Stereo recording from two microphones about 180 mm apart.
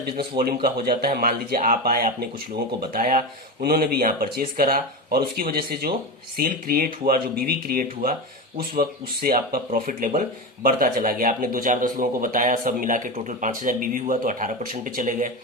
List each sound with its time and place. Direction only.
0.0 s speech: 55° right (ahead or behind)